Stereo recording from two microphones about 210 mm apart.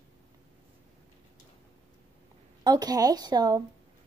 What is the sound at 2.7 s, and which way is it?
Speech, 20° right (ahead or behind).